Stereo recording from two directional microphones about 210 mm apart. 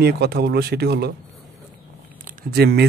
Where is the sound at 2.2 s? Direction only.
50° right (ahead or behind).